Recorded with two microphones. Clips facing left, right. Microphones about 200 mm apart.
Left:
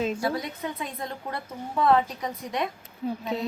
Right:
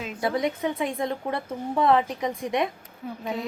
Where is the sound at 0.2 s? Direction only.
20° right (ahead or behind).